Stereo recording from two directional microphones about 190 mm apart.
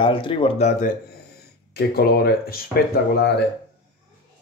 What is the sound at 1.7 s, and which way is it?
Speech, 55° left (ahead or behind).